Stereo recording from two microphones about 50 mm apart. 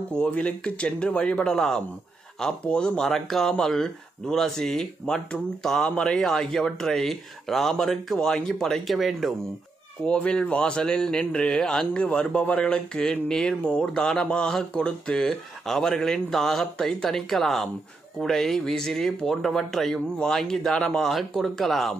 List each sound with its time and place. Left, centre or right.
0.3 s speech: left
8.8 s speech: centre
10.0 s speech: left
12.0 s speech: left; by 21.9 s centre